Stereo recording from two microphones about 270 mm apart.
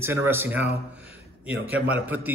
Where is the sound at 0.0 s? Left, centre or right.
Centre.